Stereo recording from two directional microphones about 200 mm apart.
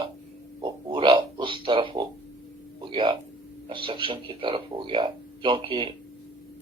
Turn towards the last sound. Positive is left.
turn(degrees=-25)  # may be behind; listen again after turning